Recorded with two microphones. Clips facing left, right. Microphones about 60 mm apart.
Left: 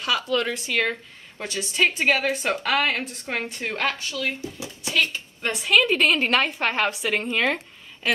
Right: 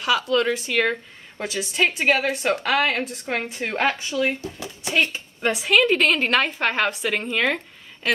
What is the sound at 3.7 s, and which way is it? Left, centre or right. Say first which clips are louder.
Speech: right 5 dB; right.